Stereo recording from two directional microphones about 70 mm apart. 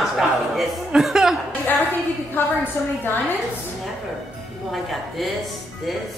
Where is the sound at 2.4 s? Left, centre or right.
Left.